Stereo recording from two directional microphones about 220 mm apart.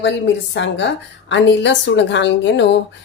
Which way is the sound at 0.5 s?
55° left (ahead or behind).